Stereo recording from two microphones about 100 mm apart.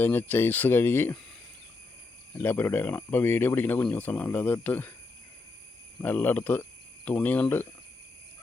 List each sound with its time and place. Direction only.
0.0 s speech: 20° left (ahead or behind)
2.3 s speech: 20° left (ahead or behind)
6.0 s speech: 20° left (ahead or behind)